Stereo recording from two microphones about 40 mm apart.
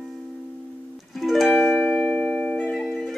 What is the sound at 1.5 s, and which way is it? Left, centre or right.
Music, centre.